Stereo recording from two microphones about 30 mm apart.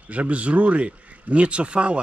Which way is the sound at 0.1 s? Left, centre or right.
Right.